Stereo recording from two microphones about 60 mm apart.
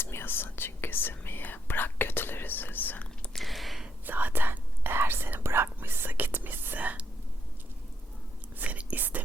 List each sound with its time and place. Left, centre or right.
0.0 s whispering: left
3.3 s a sound: centre
4.0 s whispering: right
8.5 s whispering: right